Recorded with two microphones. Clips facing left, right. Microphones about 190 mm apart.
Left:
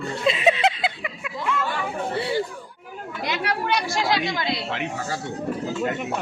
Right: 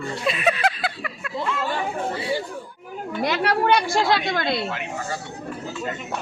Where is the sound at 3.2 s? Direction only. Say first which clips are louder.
Right 5 dB; 60° right (ahead or behind).